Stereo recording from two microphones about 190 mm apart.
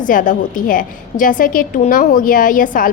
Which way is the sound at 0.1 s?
45° left (ahead or behind).